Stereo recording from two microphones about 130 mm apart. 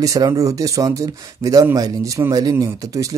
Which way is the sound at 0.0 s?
25° right (ahead or behind).